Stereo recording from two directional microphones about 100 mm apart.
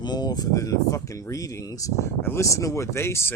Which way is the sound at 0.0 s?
45° left (ahead or behind).